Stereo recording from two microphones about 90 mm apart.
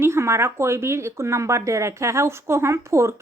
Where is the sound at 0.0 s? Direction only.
30° right (ahead or behind).